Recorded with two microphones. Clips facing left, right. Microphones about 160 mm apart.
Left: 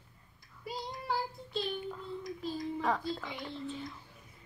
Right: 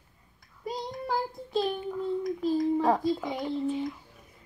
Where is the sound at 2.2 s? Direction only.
50° right (ahead or behind).